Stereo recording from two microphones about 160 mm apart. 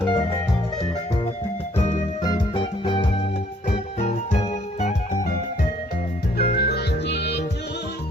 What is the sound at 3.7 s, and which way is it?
Music, 45° left (ahead or behind).